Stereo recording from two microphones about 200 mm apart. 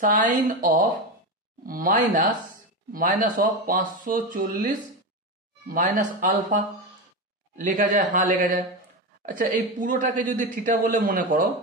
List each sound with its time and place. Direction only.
0.0 s speech: 40° right (ahead or behind)